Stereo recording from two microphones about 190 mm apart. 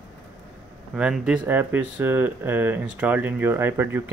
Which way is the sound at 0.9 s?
5° right (ahead or behind).